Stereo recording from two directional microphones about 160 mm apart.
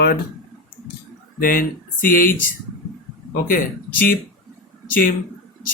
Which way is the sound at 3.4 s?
60° left (ahead or behind).